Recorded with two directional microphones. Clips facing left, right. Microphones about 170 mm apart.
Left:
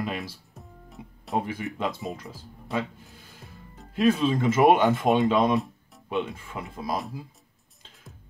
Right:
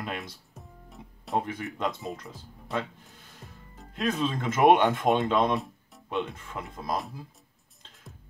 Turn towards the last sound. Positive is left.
turn(degrees=5)  # may be behind; listen again after turning